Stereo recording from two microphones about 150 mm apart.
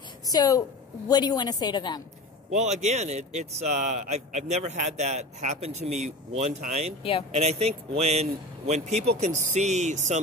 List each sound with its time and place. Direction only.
0.3 s a woman's voice: 25° left (ahead or behind)
2.5 s a man's voice: 50° right (ahead or behind)
7.0 s speech: 40° left (ahead or behind)
7.3 s a man's voice: 45° right (ahead or behind)